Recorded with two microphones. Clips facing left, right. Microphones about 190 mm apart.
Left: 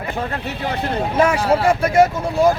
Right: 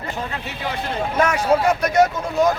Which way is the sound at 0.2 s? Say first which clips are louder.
Left 4 dB; 55° left (ahead or behind).